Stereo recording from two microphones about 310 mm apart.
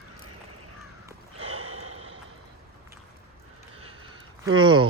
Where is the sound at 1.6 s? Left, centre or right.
Right.